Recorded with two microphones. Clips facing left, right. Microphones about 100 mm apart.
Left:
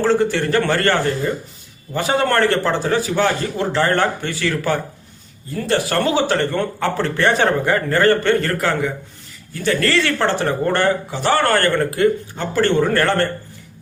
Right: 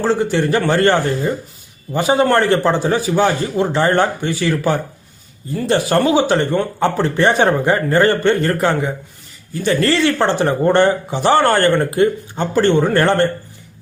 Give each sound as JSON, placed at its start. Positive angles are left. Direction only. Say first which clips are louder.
{"t": 0.0, "sound": "a man's voice", "louder": "even", "side_deg": -15}